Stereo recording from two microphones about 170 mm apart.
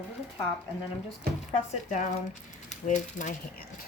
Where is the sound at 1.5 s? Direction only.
45° left (ahead or behind).